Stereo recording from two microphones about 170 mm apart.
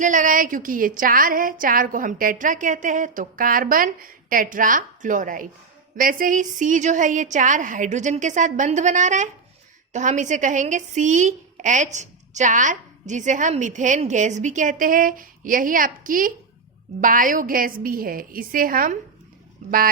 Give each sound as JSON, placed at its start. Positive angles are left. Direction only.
{"t": 0.0, "sound": "a woman's voice", "side_deg": -50}
{"t": 19.6, "sound": "a woman's voice", "side_deg": -45}